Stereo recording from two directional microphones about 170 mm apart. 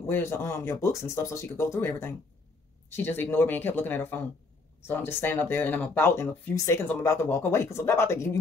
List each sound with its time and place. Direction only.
0.0 s speech: 15° left (ahead or behind)